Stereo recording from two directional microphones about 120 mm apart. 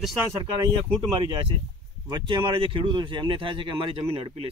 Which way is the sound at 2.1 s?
40° right (ahead or behind).